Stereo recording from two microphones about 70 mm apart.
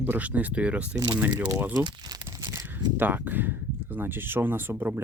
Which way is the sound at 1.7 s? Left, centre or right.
Right.